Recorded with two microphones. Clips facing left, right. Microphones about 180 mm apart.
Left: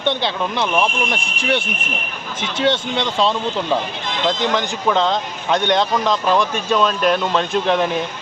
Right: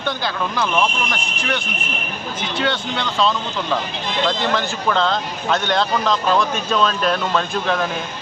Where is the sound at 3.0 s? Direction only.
30° left (ahead or behind).